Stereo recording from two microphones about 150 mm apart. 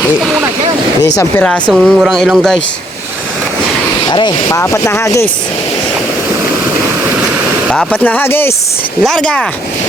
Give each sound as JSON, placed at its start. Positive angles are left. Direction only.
{"t": 0.2, "sound": "vehicle", "side_deg": 0}
{"t": 1.4, "sound": "speech", "side_deg": 10}
{"t": 4.1, "sound": "speech", "side_deg": 30}
{"t": 7.9, "sound": "speech", "side_deg": 10}